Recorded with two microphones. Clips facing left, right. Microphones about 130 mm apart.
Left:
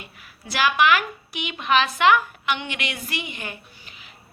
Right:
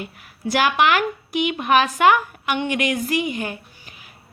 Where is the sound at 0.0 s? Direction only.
50° right (ahead or behind).